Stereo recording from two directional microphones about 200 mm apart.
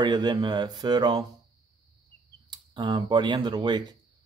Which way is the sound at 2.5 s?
20° right (ahead or behind).